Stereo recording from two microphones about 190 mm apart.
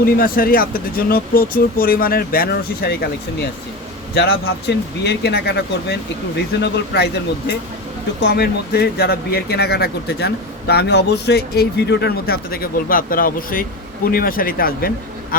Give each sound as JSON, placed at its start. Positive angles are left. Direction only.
{"t": 0.0, "sound": "speech", "side_deg": 50}
{"t": 4.1, "sound": "speech", "side_deg": 60}